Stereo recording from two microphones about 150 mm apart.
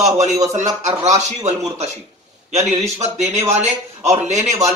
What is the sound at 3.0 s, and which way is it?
A man's voice, 50° right (ahead or behind).